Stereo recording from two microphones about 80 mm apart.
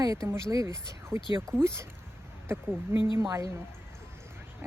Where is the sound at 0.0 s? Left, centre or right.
Right.